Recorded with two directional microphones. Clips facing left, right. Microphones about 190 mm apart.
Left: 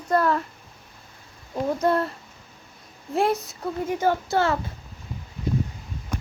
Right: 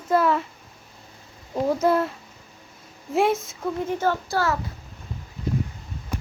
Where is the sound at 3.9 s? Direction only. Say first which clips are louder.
Left 4 dB; 15° left (ahead or behind).